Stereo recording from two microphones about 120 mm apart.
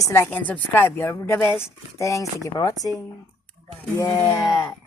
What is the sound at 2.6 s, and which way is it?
Speech, 40° left (ahead or behind).